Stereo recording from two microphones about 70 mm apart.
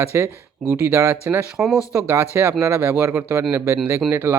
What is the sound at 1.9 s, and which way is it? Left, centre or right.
Speech, right.